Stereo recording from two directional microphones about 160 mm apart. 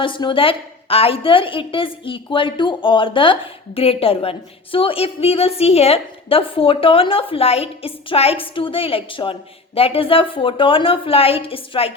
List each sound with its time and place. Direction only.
0.0 s a woman's voice: 30° left (ahead or behind)